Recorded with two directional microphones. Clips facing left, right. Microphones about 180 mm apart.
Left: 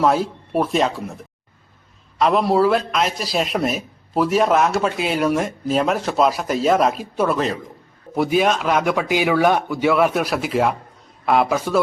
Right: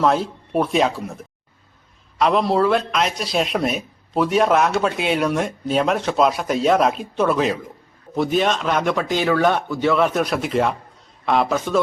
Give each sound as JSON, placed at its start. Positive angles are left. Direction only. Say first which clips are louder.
{"t": 0.0, "sound": "a man's voice", "louder": "left 1 dB", "side_deg": 5}